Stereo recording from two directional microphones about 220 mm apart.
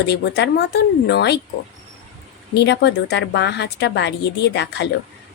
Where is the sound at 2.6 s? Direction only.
50° left (ahead or behind).